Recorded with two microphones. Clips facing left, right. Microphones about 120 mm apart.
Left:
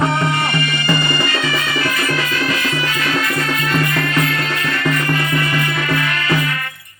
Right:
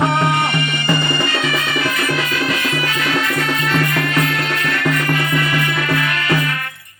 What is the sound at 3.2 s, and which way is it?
Music, 20° right (ahead or behind).